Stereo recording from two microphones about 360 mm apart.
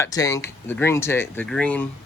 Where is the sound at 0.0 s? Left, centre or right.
Centre.